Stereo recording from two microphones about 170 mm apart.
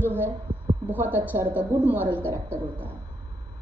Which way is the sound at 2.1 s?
10° left (ahead or behind).